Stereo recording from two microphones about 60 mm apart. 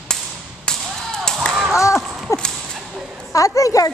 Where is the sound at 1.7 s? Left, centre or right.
Left.